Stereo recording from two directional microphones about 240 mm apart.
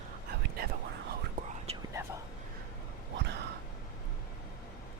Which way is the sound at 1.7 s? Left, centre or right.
Right.